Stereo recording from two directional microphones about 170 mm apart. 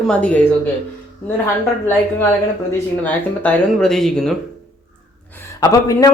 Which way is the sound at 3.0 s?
5° left (ahead or behind).